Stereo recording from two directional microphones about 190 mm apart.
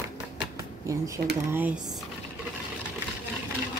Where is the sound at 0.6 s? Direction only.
15° right (ahead or behind).